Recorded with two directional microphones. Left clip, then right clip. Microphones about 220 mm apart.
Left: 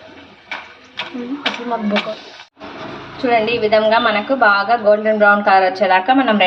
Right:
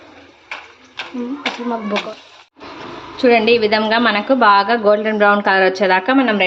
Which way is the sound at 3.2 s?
35° right (ahead or behind).